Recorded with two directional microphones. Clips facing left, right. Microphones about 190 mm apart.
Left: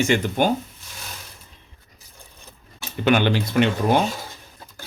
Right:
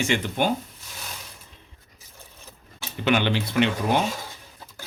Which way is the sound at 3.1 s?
50° left (ahead or behind).